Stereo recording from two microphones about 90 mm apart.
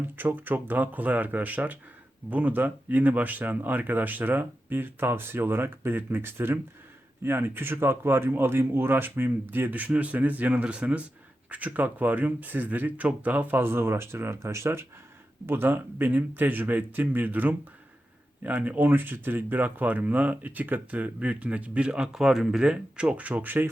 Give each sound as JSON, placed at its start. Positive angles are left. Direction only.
{"t": 0.2, "sound": "speech", "side_deg": -20}